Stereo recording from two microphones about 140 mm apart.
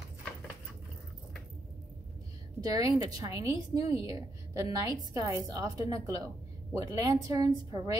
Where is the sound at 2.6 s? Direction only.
25° right (ahead or behind).